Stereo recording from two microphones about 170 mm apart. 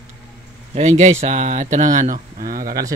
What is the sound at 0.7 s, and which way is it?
Speech, 45° right (ahead or behind).